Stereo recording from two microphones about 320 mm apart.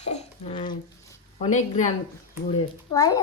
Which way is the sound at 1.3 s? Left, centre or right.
Left.